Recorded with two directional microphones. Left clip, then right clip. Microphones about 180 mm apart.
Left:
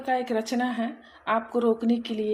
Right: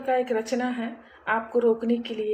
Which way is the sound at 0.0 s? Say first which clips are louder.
Right 2 dB; 45° left (ahead or behind).